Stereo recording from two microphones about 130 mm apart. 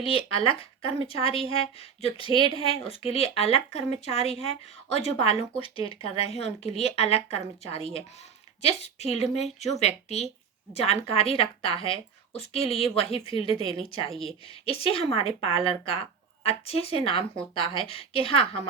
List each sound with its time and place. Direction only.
0.0 s a woman's voice: 45° left (ahead or behind)
14.1 s speech: centre (ahead or behind)
14.6 s speech: 50° left (ahead or behind)